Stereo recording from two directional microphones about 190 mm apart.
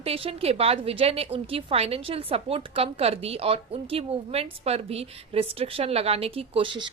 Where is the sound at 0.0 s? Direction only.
30° right (ahead or behind).